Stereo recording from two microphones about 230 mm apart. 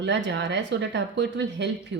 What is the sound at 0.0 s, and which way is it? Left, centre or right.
Speech, right.